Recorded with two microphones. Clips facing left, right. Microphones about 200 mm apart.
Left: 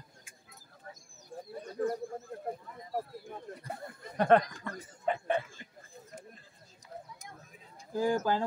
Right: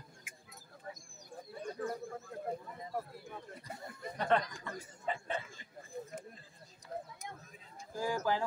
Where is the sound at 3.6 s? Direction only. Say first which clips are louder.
Left 3 dB; 55° left (ahead or behind).